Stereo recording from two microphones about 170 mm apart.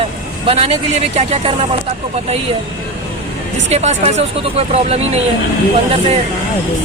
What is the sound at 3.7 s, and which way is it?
Speech, 40° right (ahead or behind).